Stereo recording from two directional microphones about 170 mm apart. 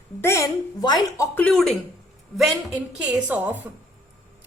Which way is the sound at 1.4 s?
Centre (ahead or behind).